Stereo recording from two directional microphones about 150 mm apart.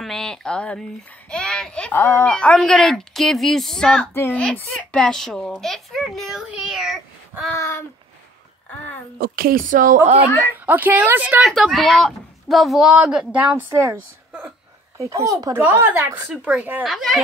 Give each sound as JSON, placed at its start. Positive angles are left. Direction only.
{"t": 0.0, "sound": "a woman's voice", "side_deg": 5}
{"t": 7.5, "sound": "a child's voice", "side_deg": 15}
{"t": 9.2, "sound": "speech", "side_deg": -80}
{"t": 10.5, "sound": "a woman's voice", "side_deg": -10}